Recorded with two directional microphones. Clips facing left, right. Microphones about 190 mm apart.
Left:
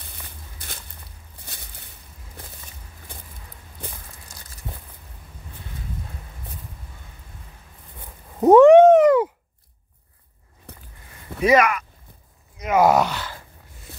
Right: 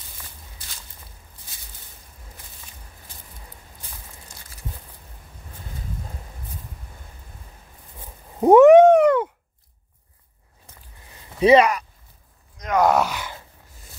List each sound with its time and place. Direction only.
8.4 s cat: 10° right (ahead or behind)
8.8 s a sound: 5° left (ahead or behind)
11.3 s speech: 30° right (ahead or behind)
12.5 s speech: 5° left (ahead or behind)
13.1 s dog: 15° right (ahead or behind)